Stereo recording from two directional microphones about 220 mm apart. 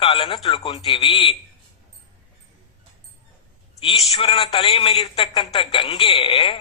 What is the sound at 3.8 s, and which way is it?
A man's voice, 25° left (ahead or behind).